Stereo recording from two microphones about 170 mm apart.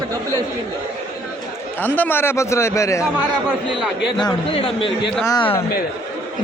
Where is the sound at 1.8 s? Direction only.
10° left (ahead or behind).